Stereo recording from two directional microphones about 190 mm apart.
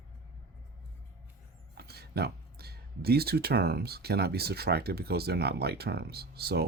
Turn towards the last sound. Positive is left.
turn(degrees=-55)  # may be behind; listen again after turning